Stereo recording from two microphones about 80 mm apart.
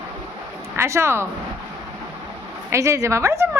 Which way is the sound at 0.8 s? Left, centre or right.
Right.